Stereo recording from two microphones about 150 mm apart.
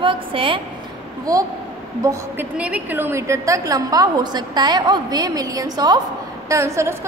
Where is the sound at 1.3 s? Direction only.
25° right (ahead or behind).